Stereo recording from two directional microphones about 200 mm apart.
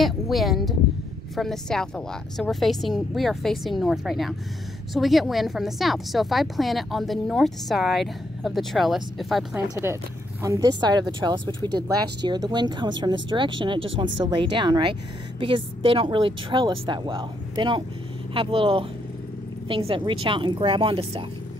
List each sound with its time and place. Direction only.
0.0 s a woman's voice: centre (ahead or behind)
10.4 s speech: 15° right (ahead or behind)
19.9 s speech: 25° right (ahead or behind)